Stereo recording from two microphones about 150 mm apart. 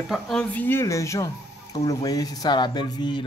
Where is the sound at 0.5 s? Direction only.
15° left (ahead or behind).